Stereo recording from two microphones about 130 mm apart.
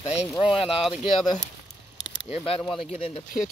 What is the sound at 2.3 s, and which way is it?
Speech, 50° left (ahead or behind).